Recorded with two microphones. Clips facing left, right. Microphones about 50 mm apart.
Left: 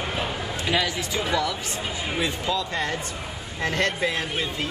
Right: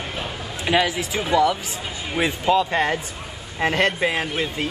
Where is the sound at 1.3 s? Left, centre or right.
Right.